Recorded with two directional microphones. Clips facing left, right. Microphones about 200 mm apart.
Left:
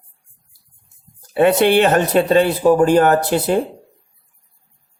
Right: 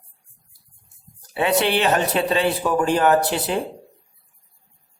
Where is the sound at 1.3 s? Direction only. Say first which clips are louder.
Left 7 dB; 50° left (ahead or behind).